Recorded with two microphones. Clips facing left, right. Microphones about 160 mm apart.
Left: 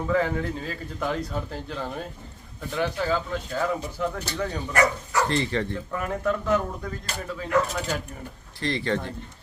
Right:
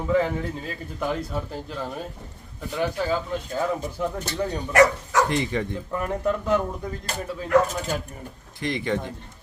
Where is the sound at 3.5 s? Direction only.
20° right (ahead or behind).